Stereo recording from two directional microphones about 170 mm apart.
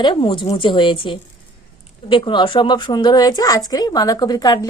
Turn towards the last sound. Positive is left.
turn(degrees=25)  # may be behind; listen again after turning